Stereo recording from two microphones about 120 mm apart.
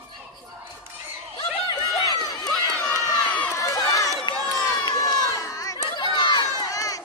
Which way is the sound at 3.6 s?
25° left (ahead or behind).